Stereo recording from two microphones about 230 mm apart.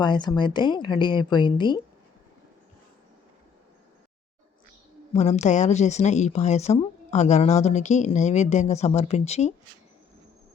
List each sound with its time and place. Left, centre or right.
0.0 s speech: centre
5.1 s speech: left